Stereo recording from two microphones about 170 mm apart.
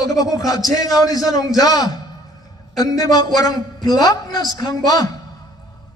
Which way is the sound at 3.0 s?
20° left (ahead or behind).